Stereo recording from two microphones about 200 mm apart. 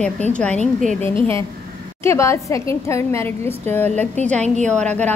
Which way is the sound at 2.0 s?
15° left (ahead or behind).